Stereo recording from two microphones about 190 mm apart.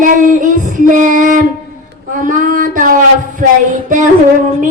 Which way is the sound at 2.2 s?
45° right (ahead or behind).